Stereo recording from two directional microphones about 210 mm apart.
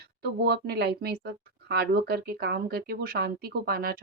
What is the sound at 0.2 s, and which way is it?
Speech, 50° right (ahead or behind).